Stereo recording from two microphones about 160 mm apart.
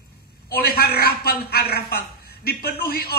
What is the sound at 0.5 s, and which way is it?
A woman's voice, 75° left (ahead or behind).